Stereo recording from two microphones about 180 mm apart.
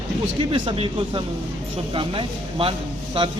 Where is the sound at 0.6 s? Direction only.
30° right (ahead or behind).